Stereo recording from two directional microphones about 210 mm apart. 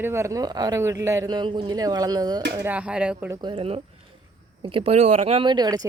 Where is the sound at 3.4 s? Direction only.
25° right (ahead or behind).